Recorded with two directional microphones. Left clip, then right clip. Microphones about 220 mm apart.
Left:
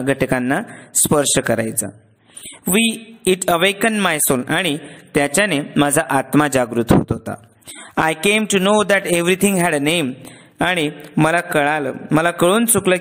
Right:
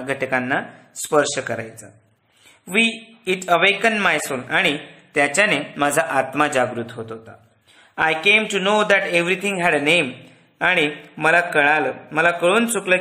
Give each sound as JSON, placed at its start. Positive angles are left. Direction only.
{"t": 0.0, "sound": "a man's voice", "side_deg": 40}